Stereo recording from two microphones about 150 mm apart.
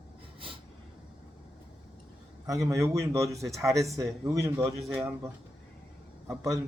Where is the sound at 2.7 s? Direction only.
20° right (ahead or behind).